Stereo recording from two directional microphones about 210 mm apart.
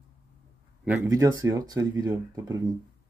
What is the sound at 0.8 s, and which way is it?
Speech, 10° right (ahead or behind).